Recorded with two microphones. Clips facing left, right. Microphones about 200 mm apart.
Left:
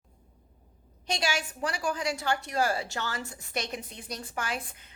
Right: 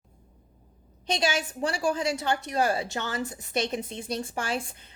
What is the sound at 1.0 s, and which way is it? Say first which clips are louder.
A woman's voice: right 4 dB; 20° right (ahead or behind).